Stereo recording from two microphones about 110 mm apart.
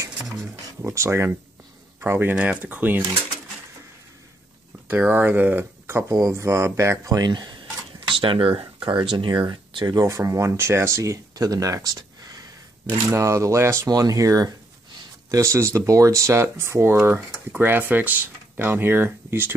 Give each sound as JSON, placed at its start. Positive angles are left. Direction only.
{"t": 0.4, "sound": "speech", "side_deg": -30}
{"t": 4.8, "sound": "speech", "side_deg": -15}
{"t": 8.1, "sound": "speech", "side_deg": -50}